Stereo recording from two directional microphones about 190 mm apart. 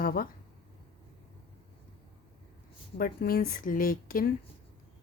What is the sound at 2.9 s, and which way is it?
A woman's voice, 50° left (ahead or behind).